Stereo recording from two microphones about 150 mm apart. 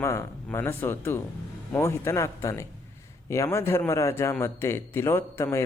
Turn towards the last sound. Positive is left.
turn(degrees=15)  # may be behind; listen again after turning